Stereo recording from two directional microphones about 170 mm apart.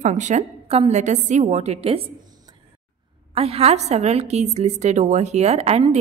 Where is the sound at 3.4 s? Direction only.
35° right (ahead or behind).